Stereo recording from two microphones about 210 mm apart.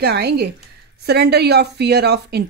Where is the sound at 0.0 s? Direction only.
50° right (ahead or behind).